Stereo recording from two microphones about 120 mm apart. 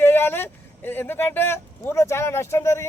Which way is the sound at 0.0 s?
20° left (ahead or behind).